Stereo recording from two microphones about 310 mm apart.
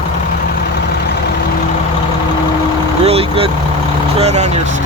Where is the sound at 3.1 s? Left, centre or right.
Centre.